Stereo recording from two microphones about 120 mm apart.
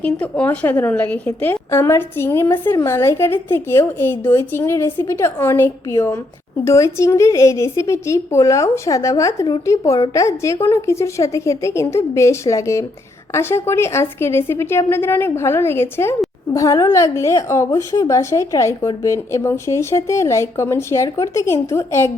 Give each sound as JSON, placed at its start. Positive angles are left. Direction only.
{"t": 0.0, "sound": "a woman's voice", "side_deg": 10}